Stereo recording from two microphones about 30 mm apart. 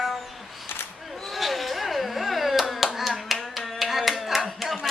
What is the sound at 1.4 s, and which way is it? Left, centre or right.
Hands, centre.